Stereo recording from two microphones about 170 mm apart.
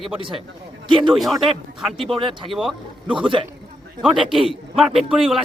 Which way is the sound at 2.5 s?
Centre (ahead or behind).